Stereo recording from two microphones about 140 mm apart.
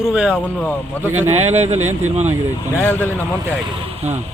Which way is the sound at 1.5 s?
50° right (ahead or behind).